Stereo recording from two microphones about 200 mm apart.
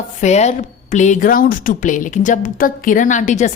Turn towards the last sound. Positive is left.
turn(degrees=35)  # may be behind; listen again after turning